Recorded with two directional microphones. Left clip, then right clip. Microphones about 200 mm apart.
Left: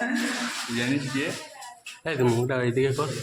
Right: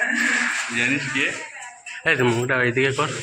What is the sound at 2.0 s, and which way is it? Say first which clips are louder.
A man's voice: right 5 dB; centre (ahead or behind).